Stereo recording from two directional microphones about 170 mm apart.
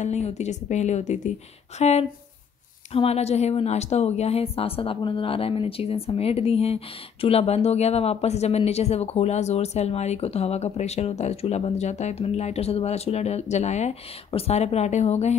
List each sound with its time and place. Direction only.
0.0 s a woman's voice: 40° left (ahead or behind)